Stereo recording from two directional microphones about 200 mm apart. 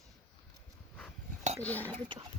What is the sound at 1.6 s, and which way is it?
Speech, 10° left (ahead or behind).